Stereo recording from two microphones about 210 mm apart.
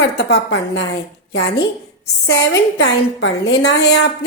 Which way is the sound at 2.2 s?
55° left (ahead or behind).